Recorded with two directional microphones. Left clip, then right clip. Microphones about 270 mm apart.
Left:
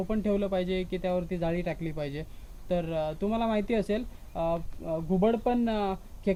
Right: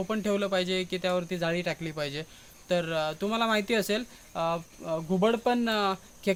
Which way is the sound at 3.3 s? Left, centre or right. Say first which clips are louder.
Right 3 dB; centre.